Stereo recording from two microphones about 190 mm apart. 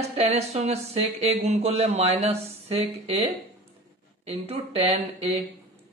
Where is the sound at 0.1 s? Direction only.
35° right (ahead or behind).